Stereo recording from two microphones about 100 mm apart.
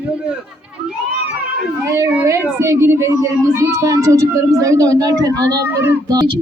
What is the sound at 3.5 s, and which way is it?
Speech, 25° right (ahead or behind).